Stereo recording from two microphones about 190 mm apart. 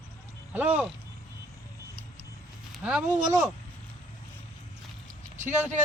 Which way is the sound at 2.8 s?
10° right (ahead or behind).